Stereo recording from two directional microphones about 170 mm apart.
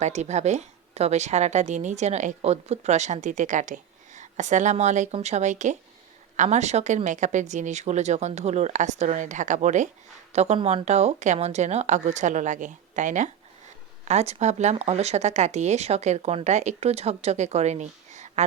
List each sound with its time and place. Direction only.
0.0 s a woman's voice: 40° right (ahead or behind)